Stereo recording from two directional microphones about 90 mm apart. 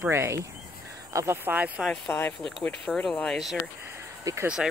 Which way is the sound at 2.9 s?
5° left (ahead or behind).